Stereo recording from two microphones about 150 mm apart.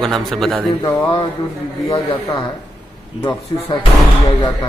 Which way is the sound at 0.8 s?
10° left (ahead or behind).